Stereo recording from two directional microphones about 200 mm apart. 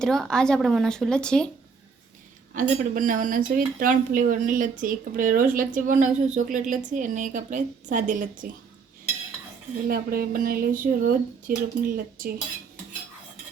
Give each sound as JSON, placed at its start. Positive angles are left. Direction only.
{"t": 0.0, "sound": "speech", "side_deg": 5}
{"t": 2.6, "sound": "speech", "side_deg": -40}
{"t": 9.8, "sound": "speech", "side_deg": -45}